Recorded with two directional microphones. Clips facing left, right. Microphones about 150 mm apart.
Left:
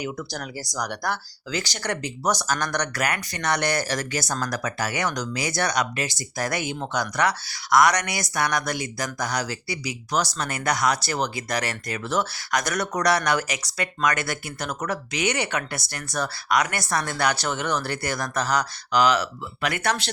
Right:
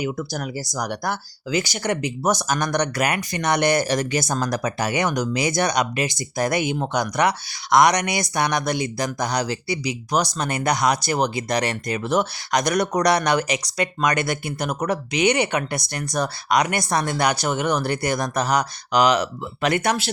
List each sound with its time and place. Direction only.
0.0 s speech: 10° right (ahead or behind)